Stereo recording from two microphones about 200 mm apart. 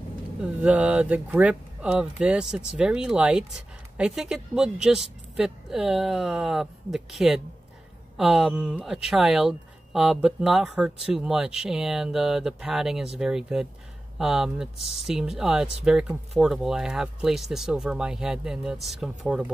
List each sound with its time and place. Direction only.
0.4 s speech: 5° right (ahead or behind)
14.8 s speech: 30° left (ahead or behind)
15.0 s speech: 5° right (ahead or behind)